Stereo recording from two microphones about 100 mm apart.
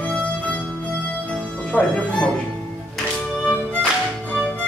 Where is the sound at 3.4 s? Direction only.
10° left (ahead or behind).